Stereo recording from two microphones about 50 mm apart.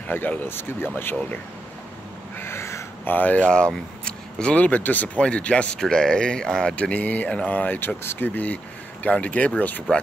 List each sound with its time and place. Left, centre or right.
0.1 s speech: left
2.3 s a sound: left
3.1 s speech: left
4.0 s speech: left
5.8 s speech: centre
6.7 s speech: left